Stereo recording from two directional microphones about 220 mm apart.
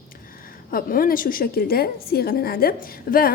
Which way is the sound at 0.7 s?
40° left (ahead or behind).